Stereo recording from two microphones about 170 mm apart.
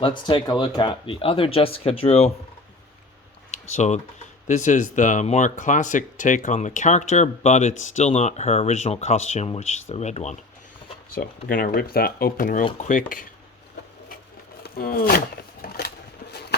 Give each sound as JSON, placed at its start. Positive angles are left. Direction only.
{"t": 0.0, "sound": "speech", "side_deg": 30}
{"t": 3.5, "sound": "speech", "side_deg": 45}
{"t": 11.4, "sound": "speech", "side_deg": 60}
{"t": 14.6, "sound": "a sound", "side_deg": 60}